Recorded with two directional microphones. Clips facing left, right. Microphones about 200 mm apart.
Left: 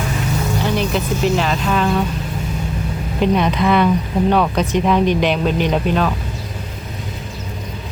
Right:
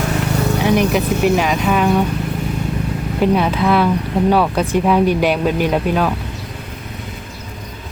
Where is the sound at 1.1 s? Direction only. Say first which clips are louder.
Right 1 dB; 60° right (ahead or behind).